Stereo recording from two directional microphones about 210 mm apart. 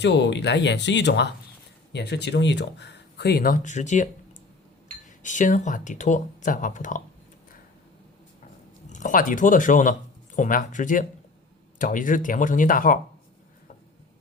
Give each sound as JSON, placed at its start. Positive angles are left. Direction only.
{"t": 0.0, "sound": "speech", "side_deg": 55}
{"t": 5.2, "sound": "speech", "side_deg": 35}
{"t": 8.9, "sound": "speech", "side_deg": 35}